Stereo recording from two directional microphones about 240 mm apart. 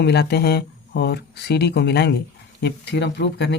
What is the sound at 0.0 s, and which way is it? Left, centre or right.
Speech, left.